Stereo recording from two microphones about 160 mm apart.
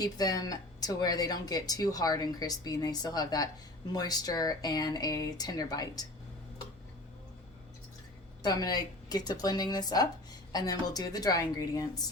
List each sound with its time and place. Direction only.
0.0 s speech: 25° left (ahead or behind)
8.4 s speech: 25° left (ahead or behind)